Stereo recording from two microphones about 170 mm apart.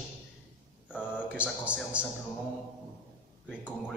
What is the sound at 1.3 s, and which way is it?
Speech, 5° right (ahead or behind).